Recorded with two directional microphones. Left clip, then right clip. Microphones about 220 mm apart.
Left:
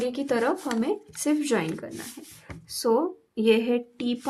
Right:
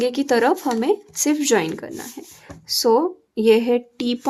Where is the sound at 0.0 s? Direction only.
35° right (ahead or behind).